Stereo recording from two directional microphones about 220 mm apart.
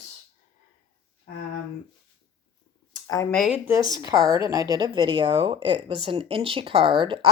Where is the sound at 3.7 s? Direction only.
15° right (ahead or behind).